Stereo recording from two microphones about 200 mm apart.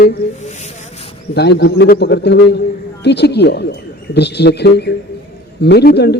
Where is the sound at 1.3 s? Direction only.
55° left (ahead or behind).